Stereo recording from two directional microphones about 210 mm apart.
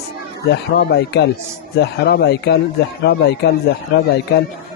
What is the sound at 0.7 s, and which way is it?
Speech, 50° left (ahead or behind).